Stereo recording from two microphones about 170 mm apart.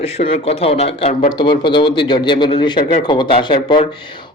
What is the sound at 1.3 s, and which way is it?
Speech, 30° left (ahead or behind).